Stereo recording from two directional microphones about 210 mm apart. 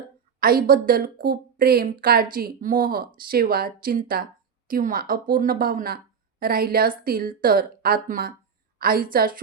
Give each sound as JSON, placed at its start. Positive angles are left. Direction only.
{"t": 0.3, "sound": "a woman's voice", "side_deg": -45}